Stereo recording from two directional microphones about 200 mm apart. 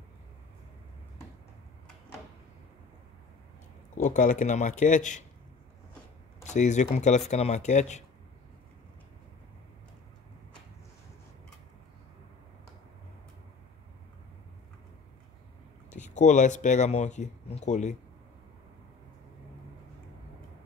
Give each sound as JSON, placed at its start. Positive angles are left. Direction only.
{"t": 3.9, "sound": "speech", "side_deg": 40}
{"t": 6.4, "sound": "speech", "side_deg": 35}
{"t": 15.9, "sound": "speech", "side_deg": 35}